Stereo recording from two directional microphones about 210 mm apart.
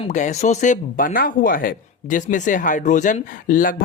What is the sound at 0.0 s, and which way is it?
Speech, 35° left (ahead or behind).